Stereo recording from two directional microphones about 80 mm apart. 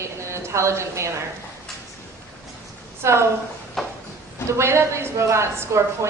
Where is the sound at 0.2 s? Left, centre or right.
Right.